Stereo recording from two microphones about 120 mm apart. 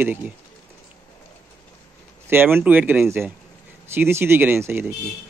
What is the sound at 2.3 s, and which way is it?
Speech, 15° right (ahead or behind).